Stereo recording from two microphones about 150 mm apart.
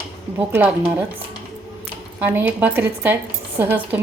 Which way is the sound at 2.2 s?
15° right (ahead or behind).